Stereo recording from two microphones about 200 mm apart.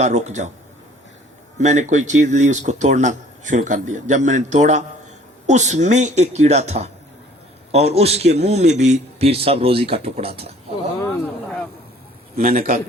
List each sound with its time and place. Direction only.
0.0 s speech: 35° right (ahead or behind)
1.5 s speech: 35° right (ahead or behind)
12.4 s a man's voice: 45° right (ahead or behind)